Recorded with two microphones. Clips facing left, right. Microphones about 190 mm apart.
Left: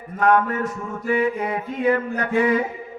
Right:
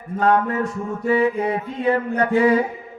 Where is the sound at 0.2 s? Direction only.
30° right (ahead or behind).